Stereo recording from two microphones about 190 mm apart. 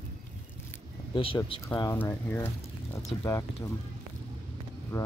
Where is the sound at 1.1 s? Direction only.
30° left (ahead or behind).